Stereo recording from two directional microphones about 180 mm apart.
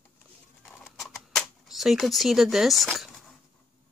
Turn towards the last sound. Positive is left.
turn(degrees=0)  # may be behind; listen again after turning